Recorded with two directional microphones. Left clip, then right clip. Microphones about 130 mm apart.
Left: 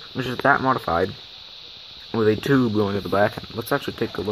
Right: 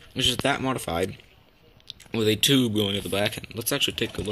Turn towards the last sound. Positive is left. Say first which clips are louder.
# left 1 dB
turn(degrees=-10)  # may be behind; listen again after turning